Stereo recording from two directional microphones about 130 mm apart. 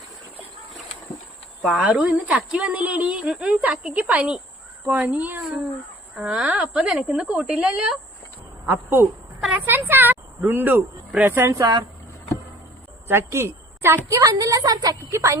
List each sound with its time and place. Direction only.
1.6 s a woman's voice: 5° right (ahead or behind); by 11.9 s 30° right (ahead or behind)
13.1 s a woman's voice: 20° right (ahead or behind)